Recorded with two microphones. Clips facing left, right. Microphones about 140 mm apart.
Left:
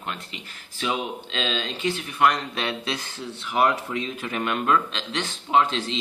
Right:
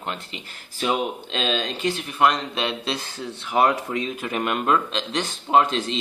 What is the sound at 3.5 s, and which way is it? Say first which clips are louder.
Speech: right 2 dB; 35° right (ahead or behind).